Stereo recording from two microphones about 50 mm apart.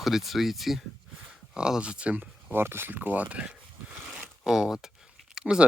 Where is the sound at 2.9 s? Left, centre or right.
Right.